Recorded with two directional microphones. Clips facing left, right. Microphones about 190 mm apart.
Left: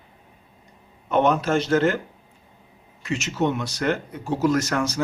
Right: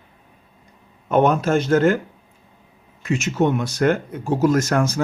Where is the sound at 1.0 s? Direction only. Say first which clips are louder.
Right 3 dB; 50° right (ahead or behind).